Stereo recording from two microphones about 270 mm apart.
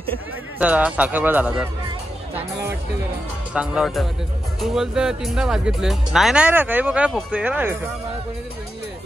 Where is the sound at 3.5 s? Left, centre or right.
Centre.